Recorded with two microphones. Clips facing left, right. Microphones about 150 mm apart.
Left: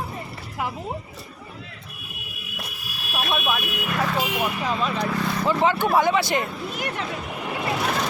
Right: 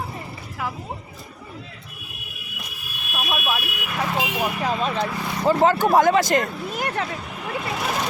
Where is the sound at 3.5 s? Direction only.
15° right (ahead or behind).